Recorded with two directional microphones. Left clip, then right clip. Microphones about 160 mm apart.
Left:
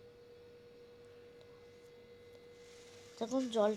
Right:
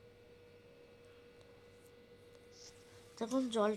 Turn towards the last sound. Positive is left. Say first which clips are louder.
# left 2 dB
turn(degrees=-20)  # may be behind; listen again after turning